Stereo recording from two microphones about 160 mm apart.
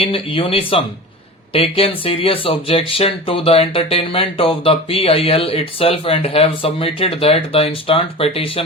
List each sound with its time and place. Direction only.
0.0 s speech: 35° left (ahead or behind)